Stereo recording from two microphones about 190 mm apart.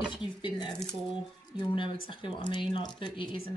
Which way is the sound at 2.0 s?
25° left (ahead or behind).